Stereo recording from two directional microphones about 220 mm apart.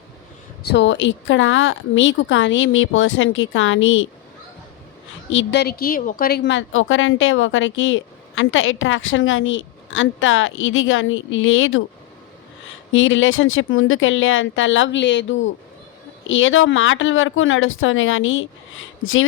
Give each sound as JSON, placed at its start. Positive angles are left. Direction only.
{"t": 0.7, "sound": "speech", "side_deg": 55}
{"t": 5.3, "sound": "speech", "side_deg": 55}
{"t": 12.9, "sound": "speech", "side_deg": 60}